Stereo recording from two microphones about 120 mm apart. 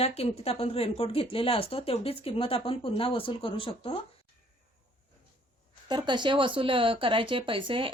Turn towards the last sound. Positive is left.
turn(degrees=-45)  # may be behind; listen again after turning